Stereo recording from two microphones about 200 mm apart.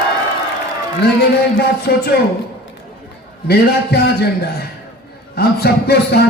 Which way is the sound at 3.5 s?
50° left (ahead or behind).